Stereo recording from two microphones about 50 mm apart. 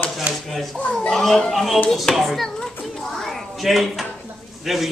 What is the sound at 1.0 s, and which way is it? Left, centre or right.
A man's voice, centre.